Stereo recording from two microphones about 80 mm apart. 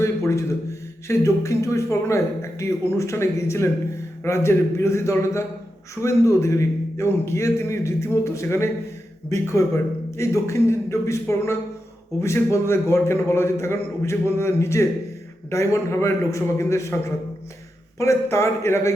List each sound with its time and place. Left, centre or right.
0.0 s speech: left
18.0 s speech: left